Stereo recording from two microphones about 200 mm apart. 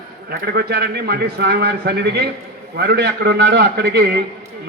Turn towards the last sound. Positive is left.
turn(degrees=-55)  # may be behind; listen again after turning